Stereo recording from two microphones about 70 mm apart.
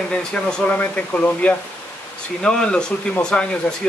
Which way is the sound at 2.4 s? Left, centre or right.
Centre.